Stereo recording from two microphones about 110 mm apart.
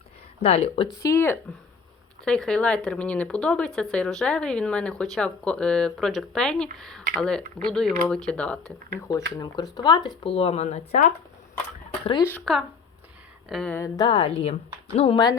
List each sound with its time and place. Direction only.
0.4 s speech: 65° left (ahead or behind)
1.0 s speech: 20° left (ahead or behind)
2.2 s speech: 5° left (ahead or behind)
9.0 s speech: 30° left (ahead or behind)
10.2 s speech: 65° left (ahead or behind); by 11.0 s 90° left
12.5 s speech: centre (ahead or behind)
14.0 s speech: 60° left (ahead or behind)
15.1 s speech: 40° left (ahead or behind)